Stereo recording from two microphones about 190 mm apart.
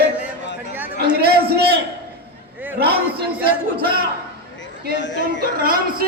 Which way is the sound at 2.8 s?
55° right (ahead or behind).